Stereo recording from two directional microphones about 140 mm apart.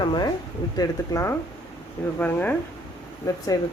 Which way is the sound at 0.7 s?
20° left (ahead or behind).